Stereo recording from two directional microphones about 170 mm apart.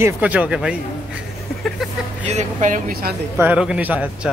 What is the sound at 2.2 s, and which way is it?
Speech, 45° right (ahead or behind).